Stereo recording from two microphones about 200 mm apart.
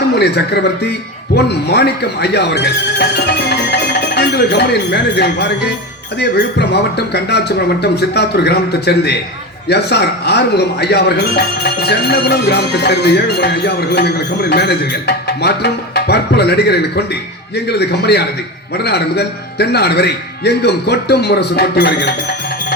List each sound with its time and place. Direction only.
0.2 s speech: 55° left (ahead or behind)